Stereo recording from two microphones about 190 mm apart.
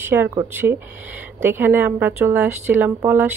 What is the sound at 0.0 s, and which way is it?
A woman's voice, 10° right (ahead or behind).